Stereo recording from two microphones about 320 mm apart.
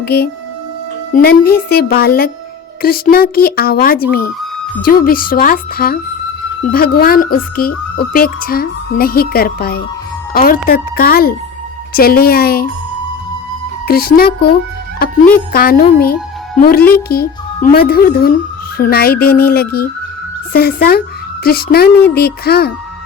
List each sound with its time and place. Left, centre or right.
0.0 s speech: left
13.8 s speech: left
15.5 s speech: left